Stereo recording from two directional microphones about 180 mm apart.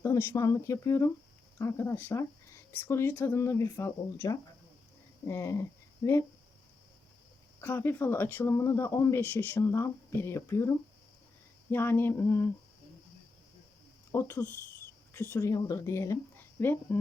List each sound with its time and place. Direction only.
0.0 s speech: 15° left (ahead or behind)
7.6 s speech: 10° left (ahead or behind)
14.1 s speech: 15° left (ahead or behind)